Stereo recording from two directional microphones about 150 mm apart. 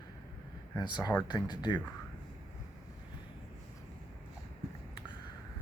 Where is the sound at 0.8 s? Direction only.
30° left (ahead or behind).